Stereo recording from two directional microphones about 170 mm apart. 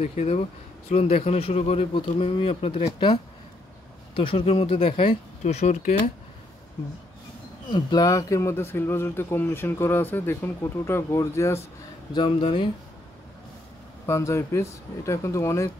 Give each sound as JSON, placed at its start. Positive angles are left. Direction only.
{"t": 0.0, "sound": "speech", "side_deg": 40}
{"t": 7.7, "sound": "speech", "side_deg": 25}
{"t": 12.1, "sound": "speech", "side_deg": 30}
{"t": 14.0, "sound": "speech", "side_deg": 15}